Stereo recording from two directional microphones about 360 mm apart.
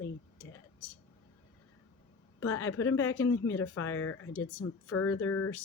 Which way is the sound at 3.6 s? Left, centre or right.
Left.